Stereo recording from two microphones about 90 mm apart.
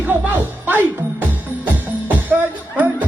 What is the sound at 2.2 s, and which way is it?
Music, 20° right (ahead or behind).